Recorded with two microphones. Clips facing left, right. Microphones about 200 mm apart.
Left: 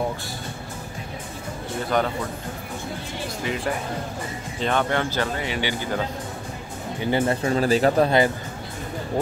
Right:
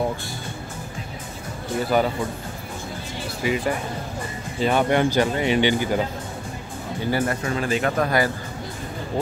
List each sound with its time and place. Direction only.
1.9 s speech: 5° right (ahead or behind)
3.4 s speech: 5° right (ahead or behind)
7.0 s speech: 20° left (ahead or behind)